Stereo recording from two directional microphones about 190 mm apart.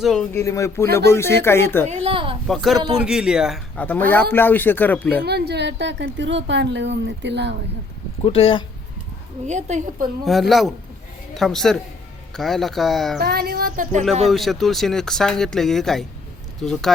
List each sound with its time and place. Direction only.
0.0 s speech: centre (ahead or behind)
0.3 s speech: 15° left (ahead or behind)
1.9 s a child's voice: 30° right (ahead or behind)
2.5 s speech: centre (ahead or behind)
5.2 s a woman's voice: 60° right (ahead or behind)
8.2 s speech: 30° left (ahead or behind)
9.5 s a woman's voice: 40° right (ahead or behind)
10.2 s speech: centre (ahead or behind)
13.1 s speech: 55° right (ahead or behind)
14.3 s speech: centre (ahead or behind)